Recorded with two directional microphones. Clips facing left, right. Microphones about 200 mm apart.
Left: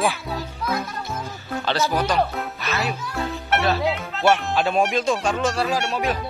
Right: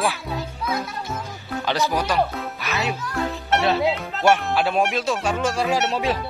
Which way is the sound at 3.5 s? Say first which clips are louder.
Right 1 dB; 25° right (ahead or behind).